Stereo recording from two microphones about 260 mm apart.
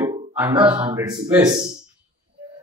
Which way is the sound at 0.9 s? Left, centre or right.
Centre.